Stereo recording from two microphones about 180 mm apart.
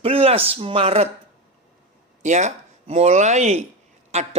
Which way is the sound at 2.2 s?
40° right (ahead or behind).